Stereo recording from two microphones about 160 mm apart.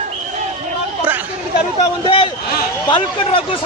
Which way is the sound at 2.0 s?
35° left (ahead or behind).